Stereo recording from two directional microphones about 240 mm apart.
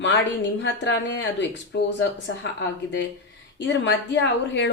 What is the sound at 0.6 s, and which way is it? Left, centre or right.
A woman's voice, left.